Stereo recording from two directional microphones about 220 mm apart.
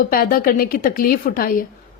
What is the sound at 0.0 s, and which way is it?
A woman's voice, 40° left (ahead or behind).